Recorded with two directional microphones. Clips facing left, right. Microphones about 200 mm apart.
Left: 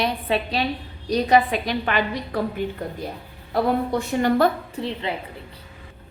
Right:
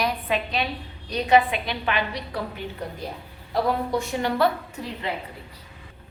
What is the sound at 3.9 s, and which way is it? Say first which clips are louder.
Speech: left 4 dB; 50° left (ahead or behind).